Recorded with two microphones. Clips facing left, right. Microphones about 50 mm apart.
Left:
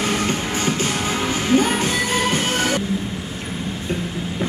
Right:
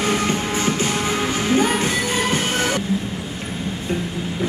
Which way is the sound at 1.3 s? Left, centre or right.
Right.